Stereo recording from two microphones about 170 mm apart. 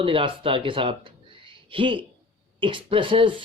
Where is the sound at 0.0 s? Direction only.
30° right (ahead or behind).